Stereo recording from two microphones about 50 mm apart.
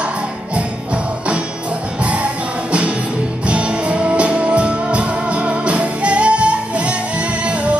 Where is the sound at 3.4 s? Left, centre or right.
Right.